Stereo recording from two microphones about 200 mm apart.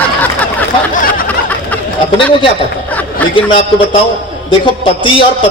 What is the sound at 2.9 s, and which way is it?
Chatter, 10° left (ahead or behind).